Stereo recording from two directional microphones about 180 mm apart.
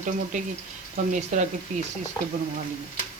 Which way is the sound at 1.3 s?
45° right (ahead or behind).